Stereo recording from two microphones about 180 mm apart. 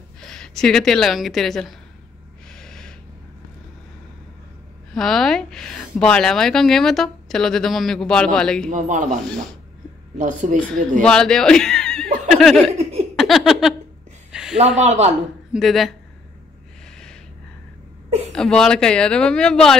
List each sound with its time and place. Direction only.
0.2 s a woman's voice: 5° left (ahead or behind)
2.5 s gasp: 5° left (ahead or behind)
4.9 s a woman's voice: centre (ahead or behind)
8.6 s speech: 45° right (ahead or behind)
10.1 s speech: 45° right (ahead or behind)
10.6 s a woman's voice: 5° left (ahead or behind)
13.1 s a sound: centre (ahead or behind)
14.8 s speech: 40° right (ahead or behind)
15.5 s a woman's voice: centre (ahead or behind)
18.3 s a woman's voice: 5° left (ahead or behind)